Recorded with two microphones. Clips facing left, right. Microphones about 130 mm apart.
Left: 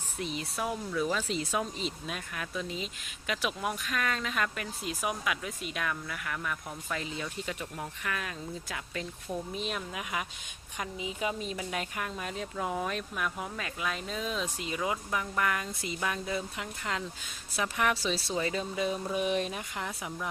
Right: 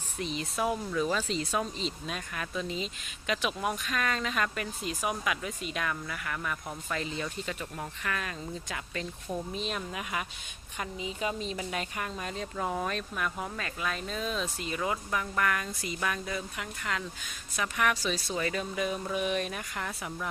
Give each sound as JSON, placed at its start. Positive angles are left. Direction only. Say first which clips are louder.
{"t": 0.2, "sound": "speech", "louder": "right 3 dB", "side_deg": 5}
{"t": 1.1, "sound": "a woman's voice", "louder": "right 1 dB", "side_deg": 10}